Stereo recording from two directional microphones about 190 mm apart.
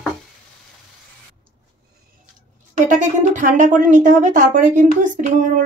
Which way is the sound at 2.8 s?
40° right (ahead or behind).